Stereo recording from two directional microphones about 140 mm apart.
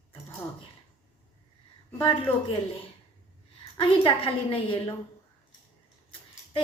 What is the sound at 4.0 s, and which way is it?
Speech, 40° left (ahead or behind).